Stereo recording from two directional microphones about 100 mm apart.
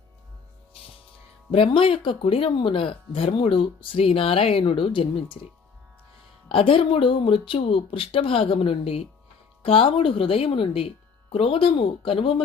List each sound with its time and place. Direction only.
1.5 s speech: 60° left (ahead or behind)
6.5 s speech: 65° left (ahead or behind); by 9.0 s 85° left
9.6 s speech: 70° left (ahead or behind)